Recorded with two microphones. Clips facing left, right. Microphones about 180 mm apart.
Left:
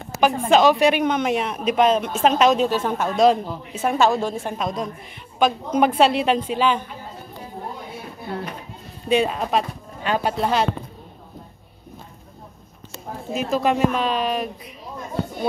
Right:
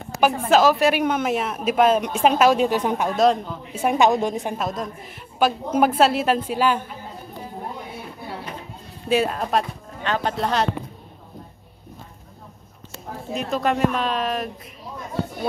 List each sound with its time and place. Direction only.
0.5 s speech: centre (ahead or behind)
3.2 s speech: centre (ahead or behind)
3.7 s speech: 15° right (ahead or behind)
4.6 s speech: centre (ahead or behind)
9.1 s speech: centre (ahead or behind)
10.0 s speech: 10° left (ahead or behind)
13.3 s speech: centre (ahead or behind)